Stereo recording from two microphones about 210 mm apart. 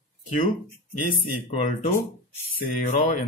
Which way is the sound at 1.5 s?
40° left (ahead or behind).